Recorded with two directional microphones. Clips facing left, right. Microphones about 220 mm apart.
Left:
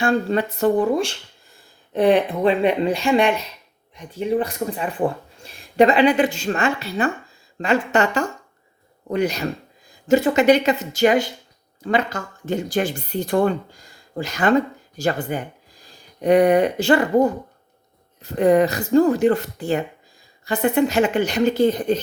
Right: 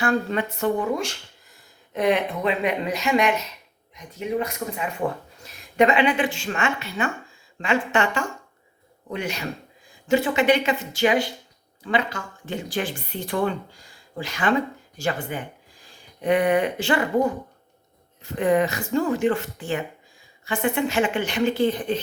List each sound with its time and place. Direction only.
0.0 s speech: 30° left (ahead or behind)